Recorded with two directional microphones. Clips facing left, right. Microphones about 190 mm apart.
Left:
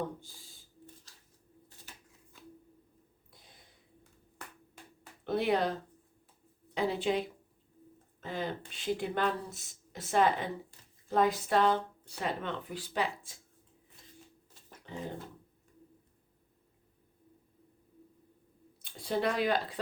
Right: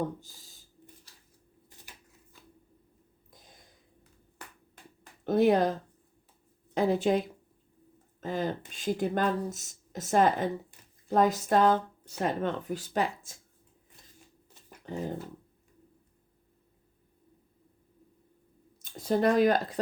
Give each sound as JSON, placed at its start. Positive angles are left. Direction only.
{"t": 5.2, "sound": "speech", "side_deg": -45}
{"t": 6.7, "sound": "speech", "side_deg": -45}
{"t": 14.9, "sound": "speech", "side_deg": -45}
{"t": 18.8, "sound": "speech", "side_deg": -45}